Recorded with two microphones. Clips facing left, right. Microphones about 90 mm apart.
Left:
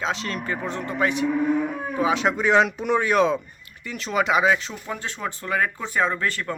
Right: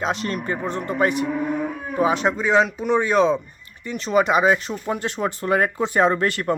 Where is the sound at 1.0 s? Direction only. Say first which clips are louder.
Left 1 dB; 50° right (ahead or behind).